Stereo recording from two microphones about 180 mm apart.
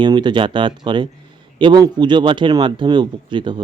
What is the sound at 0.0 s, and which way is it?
A man's voice, 25° right (ahead or behind).